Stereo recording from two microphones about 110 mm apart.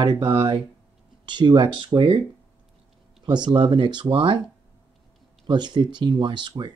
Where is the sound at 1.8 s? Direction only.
55° right (ahead or behind).